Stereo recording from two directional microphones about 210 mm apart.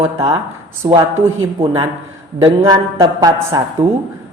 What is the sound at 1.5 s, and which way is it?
Speech, 25° right (ahead or behind).